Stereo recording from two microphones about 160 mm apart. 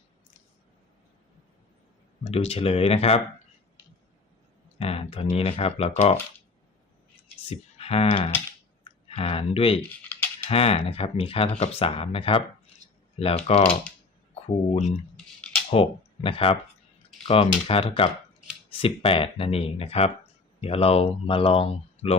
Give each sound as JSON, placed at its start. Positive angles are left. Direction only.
{"t": 2.2, "sound": "speech", "side_deg": 40}
{"t": 4.8, "sound": "speech", "side_deg": 40}
{"t": 7.5, "sound": "speech", "side_deg": 40}